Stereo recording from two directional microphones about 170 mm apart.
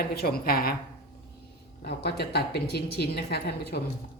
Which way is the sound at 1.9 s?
75° left (ahead or behind).